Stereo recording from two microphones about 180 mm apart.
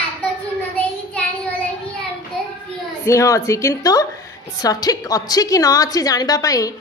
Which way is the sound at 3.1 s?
15° left (ahead or behind).